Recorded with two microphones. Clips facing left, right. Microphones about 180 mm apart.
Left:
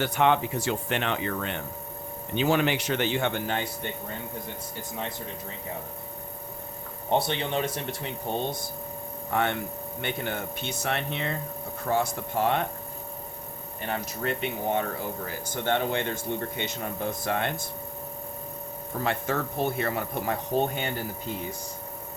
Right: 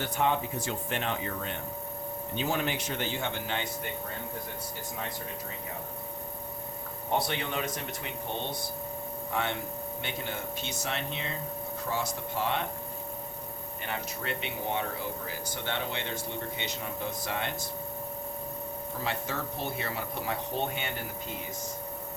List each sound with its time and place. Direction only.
0.0 s speech: 80° left; by 3.7 s 45° left (ahead or behind)
7.1 s speech: 25° left (ahead or behind)
9.3 s speech: 55° left (ahead or behind)
13.8 s speech: 40° left (ahead or behind)
19.0 s speech: 55° left (ahead or behind)